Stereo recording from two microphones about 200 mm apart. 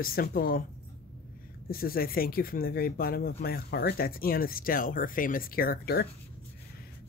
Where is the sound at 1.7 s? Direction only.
45° left (ahead or behind).